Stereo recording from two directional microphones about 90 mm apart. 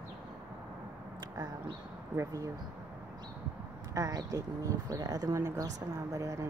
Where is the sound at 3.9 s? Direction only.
40° right (ahead or behind).